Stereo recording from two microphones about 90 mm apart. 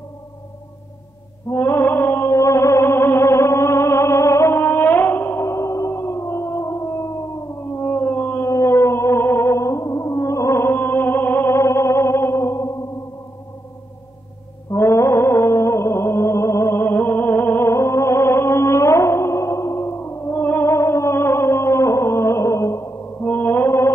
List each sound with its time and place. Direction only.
1.5 s music: 25° left (ahead or behind)
14.7 s music: 30° left (ahead or behind)
23.2 s music: 20° left (ahead or behind)